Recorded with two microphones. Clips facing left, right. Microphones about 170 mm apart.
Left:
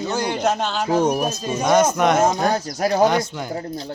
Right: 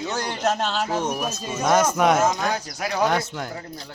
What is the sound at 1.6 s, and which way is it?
Speech, centre (ahead or behind).